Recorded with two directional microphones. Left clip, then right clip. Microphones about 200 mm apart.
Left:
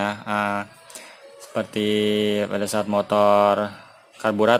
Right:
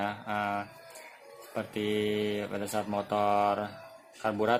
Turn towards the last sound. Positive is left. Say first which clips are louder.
# left 10 dB
turn(degrees=45)  # may be behind; listen again after turning